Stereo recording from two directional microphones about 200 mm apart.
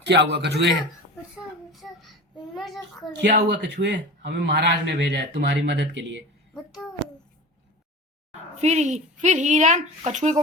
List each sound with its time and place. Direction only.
0.0 s a man's voice: 60° right (ahead or behind)
1.7 s child singing: centre (ahead or behind)
3.2 s a man's voice: 55° right (ahead or behind)
6.5 s a sound: centre (ahead or behind)
8.3 s speech: 35° right (ahead or behind)